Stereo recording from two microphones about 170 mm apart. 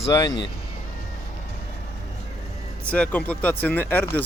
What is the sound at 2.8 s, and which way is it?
Speech, 10° left (ahead or behind).